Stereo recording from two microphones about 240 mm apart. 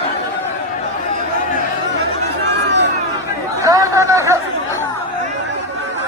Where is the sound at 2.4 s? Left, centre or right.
Right.